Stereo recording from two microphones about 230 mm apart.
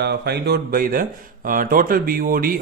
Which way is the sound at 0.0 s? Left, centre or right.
Right.